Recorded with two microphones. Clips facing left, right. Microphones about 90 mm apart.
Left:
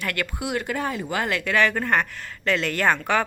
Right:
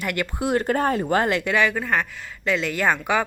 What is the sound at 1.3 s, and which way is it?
Speech, 20° right (ahead or behind).